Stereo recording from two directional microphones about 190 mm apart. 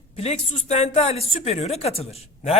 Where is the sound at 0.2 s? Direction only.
35° left (ahead or behind).